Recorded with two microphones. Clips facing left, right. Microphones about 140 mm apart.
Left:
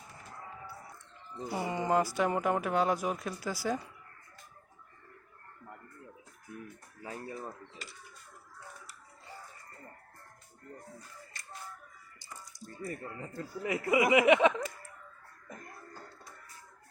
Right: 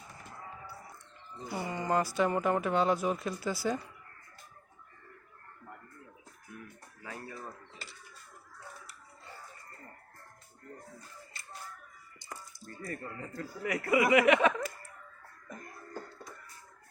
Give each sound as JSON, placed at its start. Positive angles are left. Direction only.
{"t": 1.5, "sound": "speech", "side_deg": 20}
{"t": 7.0, "sound": "music", "side_deg": 30}
{"t": 12.6, "sound": "speech", "side_deg": 20}